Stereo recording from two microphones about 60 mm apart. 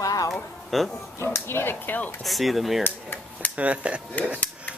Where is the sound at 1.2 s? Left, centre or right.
Left.